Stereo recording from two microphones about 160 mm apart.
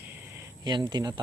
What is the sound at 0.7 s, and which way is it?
Speech, 25° right (ahead or behind).